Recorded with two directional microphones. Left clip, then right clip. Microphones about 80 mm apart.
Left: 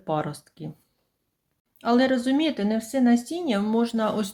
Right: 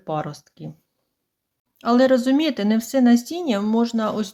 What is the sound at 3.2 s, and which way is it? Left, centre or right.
Speech, right.